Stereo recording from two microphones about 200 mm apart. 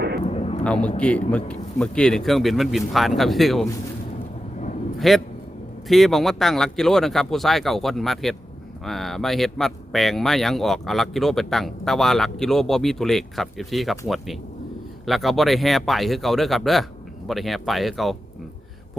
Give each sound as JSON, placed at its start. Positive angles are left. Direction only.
{"t": 0.3, "sound": "vehicle", "side_deg": 30}
{"t": 0.6, "sound": "speech", "side_deg": 5}
{"t": 4.9, "sound": "a man's voice", "side_deg": 0}
{"t": 15.0, "sound": "speech", "side_deg": 0}